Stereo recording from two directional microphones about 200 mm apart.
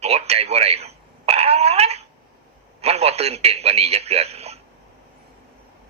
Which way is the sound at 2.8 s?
30° right (ahead or behind).